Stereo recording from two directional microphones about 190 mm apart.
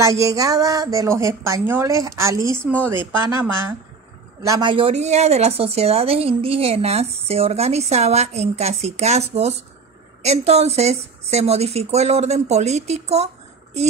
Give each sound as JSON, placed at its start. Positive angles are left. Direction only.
{"t": 0.0, "sound": "a woman's voice", "side_deg": -15}